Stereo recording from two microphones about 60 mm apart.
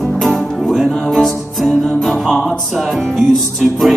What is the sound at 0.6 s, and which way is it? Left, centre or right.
Music, centre.